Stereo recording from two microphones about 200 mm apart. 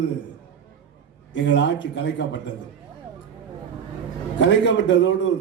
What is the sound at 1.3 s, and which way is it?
A man's voice, 65° left (ahead or behind).